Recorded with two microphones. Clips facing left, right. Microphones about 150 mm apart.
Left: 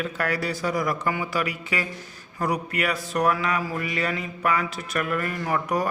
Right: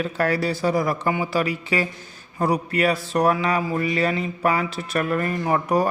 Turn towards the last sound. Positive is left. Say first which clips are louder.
# right 4 dB
turn(degrees=-30)  # may be behind; listen again after turning